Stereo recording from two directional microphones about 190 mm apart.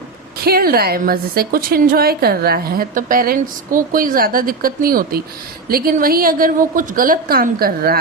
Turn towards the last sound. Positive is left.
turn(degrees=-50)  # may be behind; listen again after turning